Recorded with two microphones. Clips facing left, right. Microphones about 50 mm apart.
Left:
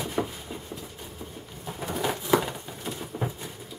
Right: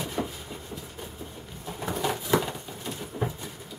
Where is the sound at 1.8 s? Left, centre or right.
Centre.